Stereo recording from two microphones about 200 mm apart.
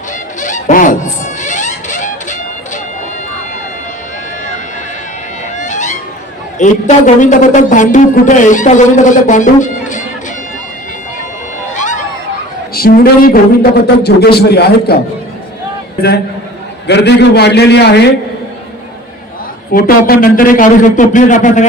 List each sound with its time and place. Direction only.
0.3 s music: 40° left (ahead or behind)
5.6 s a sound: 40° left (ahead or behind)
6.6 s a man's voice: 40° left (ahead or behind)
11.7 s a sound: 40° left (ahead or behind)
12.7 s speech: 50° left (ahead or behind)
16.0 s a man's voice: 55° left (ahead or behind)
19.7 s a man's voice: 45° left (ahead or behind)